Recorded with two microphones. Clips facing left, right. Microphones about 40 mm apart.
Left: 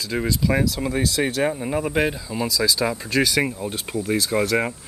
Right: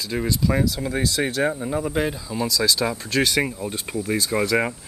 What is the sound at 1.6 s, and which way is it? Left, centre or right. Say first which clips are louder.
Speech: left 2 dB; centre.